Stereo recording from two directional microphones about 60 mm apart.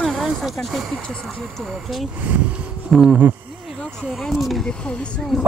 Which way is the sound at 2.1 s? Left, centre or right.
Right.